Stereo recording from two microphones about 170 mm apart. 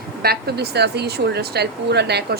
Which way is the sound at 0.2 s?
70° right (ahead or behind).